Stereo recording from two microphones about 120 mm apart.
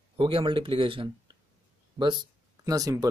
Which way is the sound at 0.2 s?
45° right (ahead or behind).